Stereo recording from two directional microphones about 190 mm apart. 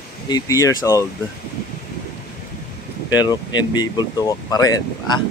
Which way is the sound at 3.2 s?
20° left (ahead or behind).